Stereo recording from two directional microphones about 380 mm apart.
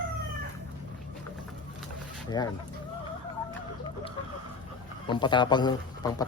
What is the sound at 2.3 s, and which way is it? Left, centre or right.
Speech, centre.